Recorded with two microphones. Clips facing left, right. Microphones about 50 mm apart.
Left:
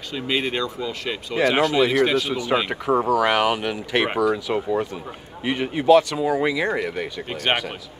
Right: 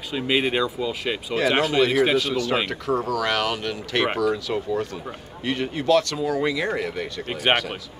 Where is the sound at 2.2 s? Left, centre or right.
Centre.